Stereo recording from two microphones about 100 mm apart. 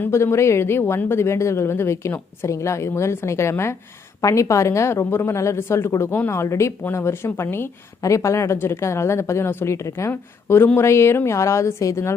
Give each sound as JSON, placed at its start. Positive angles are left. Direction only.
{"t": 0.0, "sound": "speech", "side_deg": 25}